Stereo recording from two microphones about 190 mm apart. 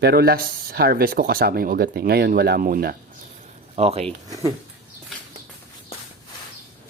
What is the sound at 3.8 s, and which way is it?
Speech, 35° right (ahead or behind).